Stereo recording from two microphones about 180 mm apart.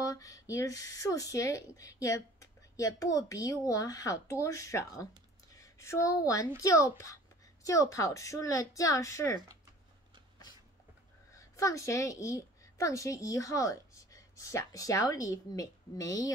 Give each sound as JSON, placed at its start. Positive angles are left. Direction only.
{"t": 0.0, "sound": "a woman's voice", "side_deg": 20}
{"t": 11.3, "sound": "a woman's voice", "side_deg": 20}